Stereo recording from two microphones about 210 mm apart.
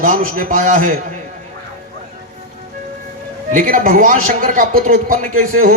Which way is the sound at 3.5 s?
40° right (ahead or behind).